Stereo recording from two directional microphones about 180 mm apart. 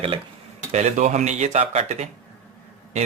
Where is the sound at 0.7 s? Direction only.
40° right (ahead or behind).